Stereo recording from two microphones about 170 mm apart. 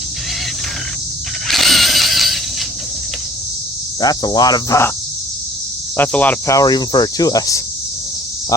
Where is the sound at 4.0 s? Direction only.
25° left (ahead or behind).